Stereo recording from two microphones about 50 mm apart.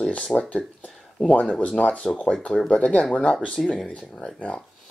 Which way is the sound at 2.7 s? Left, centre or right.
Left.